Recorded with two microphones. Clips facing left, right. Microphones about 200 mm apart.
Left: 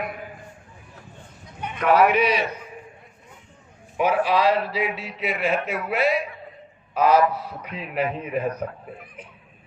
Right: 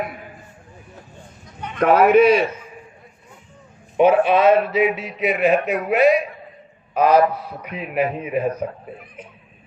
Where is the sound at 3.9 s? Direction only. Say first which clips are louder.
Right 6 dB; 25° right (ahead or behind).